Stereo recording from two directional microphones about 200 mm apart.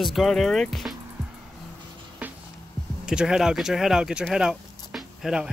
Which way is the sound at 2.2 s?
10° right (ahead or behind).